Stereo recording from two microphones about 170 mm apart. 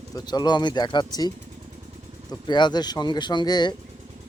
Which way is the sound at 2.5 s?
25° left (ahead or behind).